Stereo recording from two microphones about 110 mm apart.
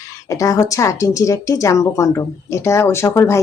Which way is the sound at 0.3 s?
30° left (ahead or behind).